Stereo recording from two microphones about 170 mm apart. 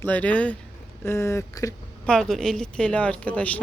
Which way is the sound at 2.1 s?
5° left (ahead or behind).